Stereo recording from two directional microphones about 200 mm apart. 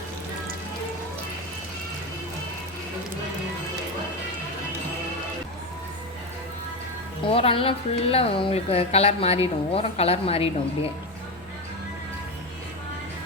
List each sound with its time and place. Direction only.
7.3 s speech: 30° left (ahead or behind)